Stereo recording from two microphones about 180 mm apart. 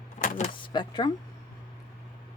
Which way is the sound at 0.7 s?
25° left (ahead or behind).